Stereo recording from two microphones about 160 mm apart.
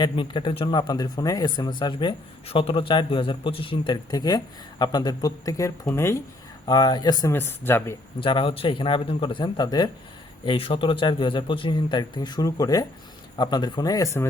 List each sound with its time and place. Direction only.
0.0 s speech: 30° left (ahead or behind); by 7.9 s 15° left (ahead or behind)
8.2 s a man's voice: 30° left (ahead or behind)